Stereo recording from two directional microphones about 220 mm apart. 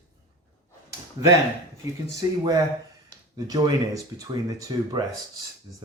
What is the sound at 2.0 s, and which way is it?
Speech, 15° right (ahead or behind).